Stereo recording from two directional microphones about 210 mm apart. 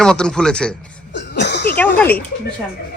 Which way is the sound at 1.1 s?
55° left (ahead or behind).